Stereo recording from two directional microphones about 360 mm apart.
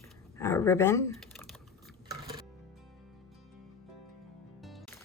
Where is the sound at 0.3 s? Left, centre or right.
Centre.